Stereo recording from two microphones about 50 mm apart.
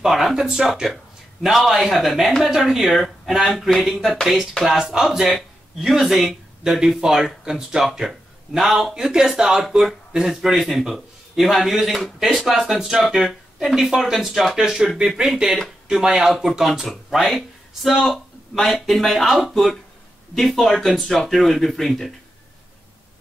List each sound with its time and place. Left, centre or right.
0.0 s a man's voice: centre